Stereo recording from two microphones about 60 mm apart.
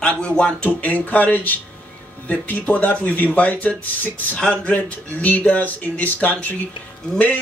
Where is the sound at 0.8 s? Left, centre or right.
Left.